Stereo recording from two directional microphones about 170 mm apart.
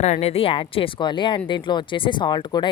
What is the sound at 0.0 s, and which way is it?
Speech, 40° left (ahead or behind).